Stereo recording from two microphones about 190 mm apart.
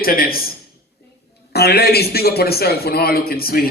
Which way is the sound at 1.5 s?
55° left (ahead or behind).